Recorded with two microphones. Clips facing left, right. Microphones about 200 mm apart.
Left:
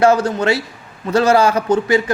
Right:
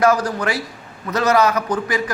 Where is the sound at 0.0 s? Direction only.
25° left (ahead or behind).